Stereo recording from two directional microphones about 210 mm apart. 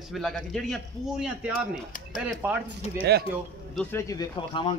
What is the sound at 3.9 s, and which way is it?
Speech, 15° left (ahead or behind).